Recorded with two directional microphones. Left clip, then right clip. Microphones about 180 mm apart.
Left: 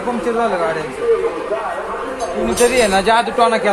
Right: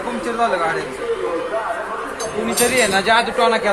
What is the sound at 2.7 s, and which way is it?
Speech, 40° left (ahead or behind).